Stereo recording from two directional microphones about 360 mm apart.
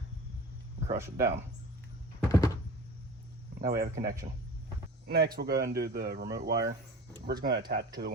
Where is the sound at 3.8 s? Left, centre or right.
Right.